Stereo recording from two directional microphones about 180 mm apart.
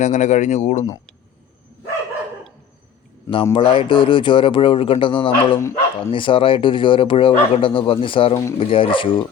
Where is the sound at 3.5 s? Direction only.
30° left (ahead or behind).